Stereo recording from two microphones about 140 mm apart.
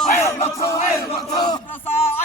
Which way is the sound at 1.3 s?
30° left (ahead or behind).